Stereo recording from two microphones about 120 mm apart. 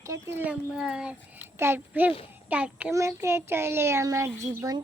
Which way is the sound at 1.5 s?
20° right (ahead or behind).